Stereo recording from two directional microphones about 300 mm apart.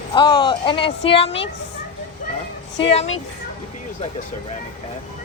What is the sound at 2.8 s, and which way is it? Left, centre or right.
Speech, centre.